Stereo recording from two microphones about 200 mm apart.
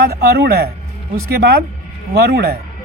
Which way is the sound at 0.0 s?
50° right (ahead or behind).